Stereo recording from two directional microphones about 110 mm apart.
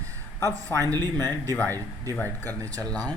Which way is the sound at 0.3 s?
25° left (ahead or behind).